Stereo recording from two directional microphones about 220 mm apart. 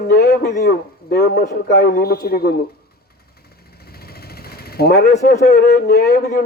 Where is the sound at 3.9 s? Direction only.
45° left (ahead or behind).